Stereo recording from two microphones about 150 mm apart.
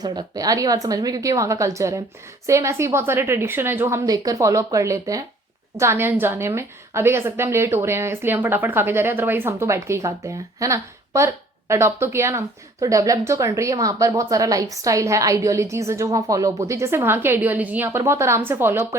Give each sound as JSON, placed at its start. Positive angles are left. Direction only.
{"t": 0.0, "sound": "a woman's voice", "side_deg": -25}